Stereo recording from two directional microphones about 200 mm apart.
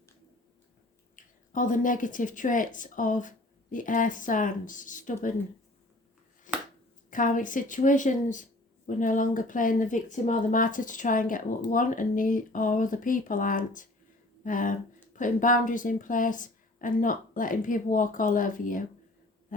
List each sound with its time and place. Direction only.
1.1 s speech: 40° left (ahead or behind)
6.5 s finger snapping: 40° left (ahead or behind)
7.1 s speech: 40° left (ahead or behind)